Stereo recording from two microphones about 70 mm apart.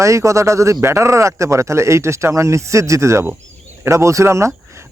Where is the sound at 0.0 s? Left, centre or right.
Right.